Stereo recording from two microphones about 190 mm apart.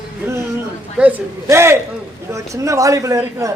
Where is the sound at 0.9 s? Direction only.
10° right (ahead or behind).